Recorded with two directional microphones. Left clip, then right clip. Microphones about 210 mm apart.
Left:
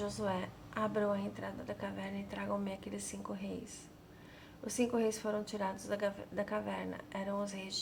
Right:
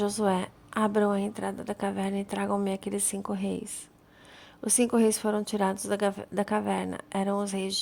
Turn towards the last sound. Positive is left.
turn(degrees=-50)  # may be behind; listen again after turning